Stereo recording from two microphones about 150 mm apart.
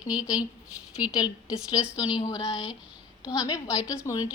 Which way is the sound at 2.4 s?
5° right (ahead or behind).